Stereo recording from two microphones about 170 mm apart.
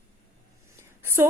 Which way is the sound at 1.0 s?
15° right (ahead or behind).